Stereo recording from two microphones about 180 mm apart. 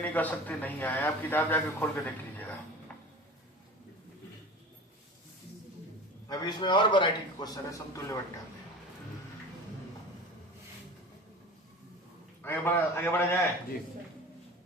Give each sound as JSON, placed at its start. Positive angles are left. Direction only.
{"t": 0.0, "sound": "a man's voice", "side_deg": 10}
{"t": 6.2, "sound": "a man's voice", "side_deg": 20}
{"t": 12.4, "sound": "a man's voice", "side_deg": 10}